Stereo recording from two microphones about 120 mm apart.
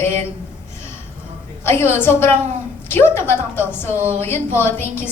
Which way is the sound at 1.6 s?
20° left (ahead or behind).